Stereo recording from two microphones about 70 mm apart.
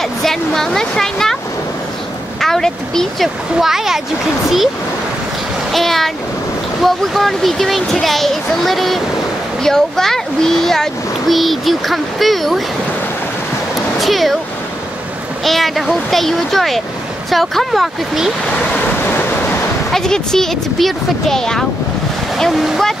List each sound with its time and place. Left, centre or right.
0.2 s speech: centre
2.4 s speech: centre
3.6 s a child's voice: centre
5.7 s a child's voice: centre
13.9 s speech: centre
15.4 s a child's voice: centre
19.0 s waves: left
19.9 s a child's voice: centre